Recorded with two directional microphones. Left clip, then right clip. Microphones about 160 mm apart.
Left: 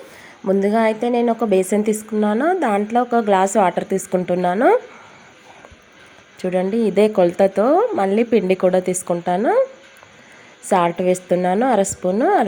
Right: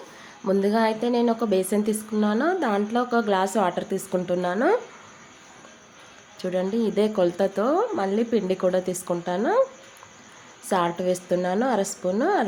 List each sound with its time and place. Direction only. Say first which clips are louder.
0.4 s a woman's voice: left 5 dB; 25° left (ahead or behind)
6.4 s a woman's voice: left 6 dB; 25° left (ahead or behind)
10.7 s a woman's voice: left 7 dB; 25° left (ahead or behind)